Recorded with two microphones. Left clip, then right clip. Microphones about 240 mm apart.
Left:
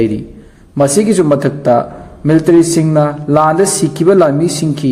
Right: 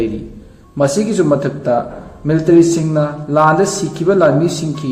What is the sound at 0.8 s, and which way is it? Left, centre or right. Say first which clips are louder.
A man's voice: left 4 dB; left.